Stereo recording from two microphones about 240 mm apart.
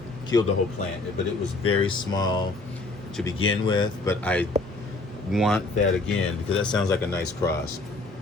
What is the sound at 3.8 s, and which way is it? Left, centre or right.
Speech, centre.